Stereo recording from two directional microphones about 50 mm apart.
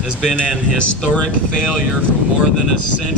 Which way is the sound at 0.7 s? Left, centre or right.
Left.